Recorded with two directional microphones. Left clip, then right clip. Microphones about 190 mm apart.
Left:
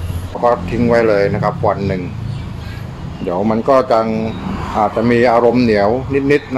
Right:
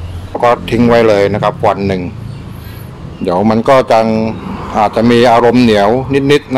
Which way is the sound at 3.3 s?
40° right (ahead or behind).